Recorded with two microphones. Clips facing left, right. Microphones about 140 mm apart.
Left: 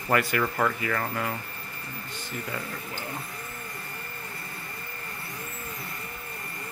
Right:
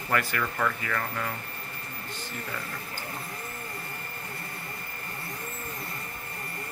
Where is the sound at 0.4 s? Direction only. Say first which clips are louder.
Left 3 dB; 30° left (ahead or behind).